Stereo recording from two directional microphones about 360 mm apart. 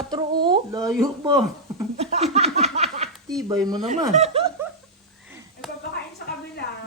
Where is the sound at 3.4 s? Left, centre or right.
Centre.